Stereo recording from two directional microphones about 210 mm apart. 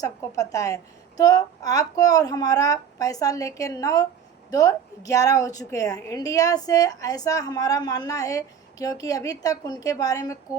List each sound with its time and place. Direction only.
0.0 s a woman's voice: 15° left (ahead or behind)